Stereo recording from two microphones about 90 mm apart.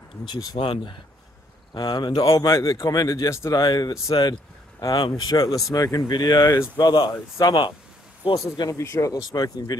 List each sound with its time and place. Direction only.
0.3 s a man's voice: 40° left (ahead or behind)
0.6 s speech: 70° left (ahead or behind)
1.7 s speech: 55° left (ahead or behind)
2.2 s a man's voice: 40° left (ahead or behind)
3.5 s speech: 50° left (ahead or behind)
4.9 s speech: 60° left (ahead or behind)
5.7 s a man's voice: 40° left (ahead or behind)
6.0 s speech: 55° left (ahead or behind)
8.7 s a man's voice: 35° left (ahead or behind)
9.2 s speech: 50° left (ahead or behind)